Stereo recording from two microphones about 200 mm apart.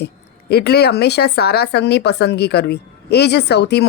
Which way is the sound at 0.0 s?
55° left (ahead or behind).